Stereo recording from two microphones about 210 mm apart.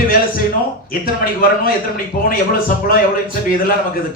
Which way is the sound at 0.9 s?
45° left (ahead or behind).